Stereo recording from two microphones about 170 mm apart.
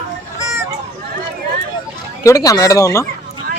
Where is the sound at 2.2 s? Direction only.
20° left (ahead or behind).